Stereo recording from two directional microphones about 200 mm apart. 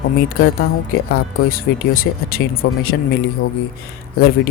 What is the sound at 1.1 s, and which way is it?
Speech, 45° left (ahead or behind).